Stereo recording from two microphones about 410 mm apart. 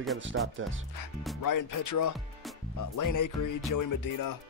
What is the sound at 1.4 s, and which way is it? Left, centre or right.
Speech, left.